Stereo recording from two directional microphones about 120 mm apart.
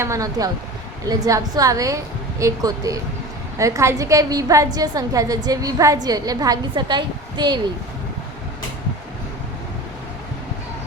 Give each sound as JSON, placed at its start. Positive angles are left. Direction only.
{"t": 0.0, "sound": "a woman's voice", "side_deg": -25}